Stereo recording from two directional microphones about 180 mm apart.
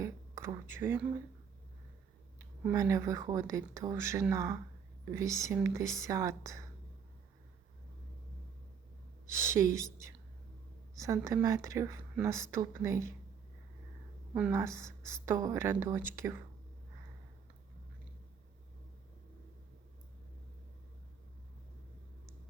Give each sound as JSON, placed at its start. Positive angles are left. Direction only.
{"t": 0.0, "sound": "a sound", "side_deg": -15}
{"t": 2.4, "sound": "speech", "side_deg": -15}
{"t": 9.3, "sound": "speech", "side_deg": -15}
{"t": 14.3, "sound": "speech", "side_deg": -10}